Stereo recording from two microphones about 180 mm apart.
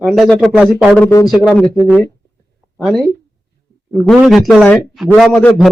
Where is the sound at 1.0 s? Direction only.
15° left (ahead or behind).